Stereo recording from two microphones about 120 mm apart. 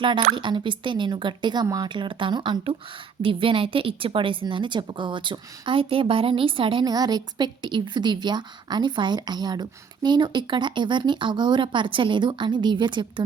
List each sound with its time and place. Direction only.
0.3 s a woman's voice: 40° right (ahead or behind)
6.8 s a woman's voice: 35° right (ahead or behind)